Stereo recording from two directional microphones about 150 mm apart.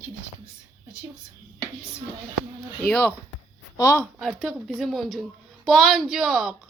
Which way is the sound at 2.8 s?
10° left (ahead or behind).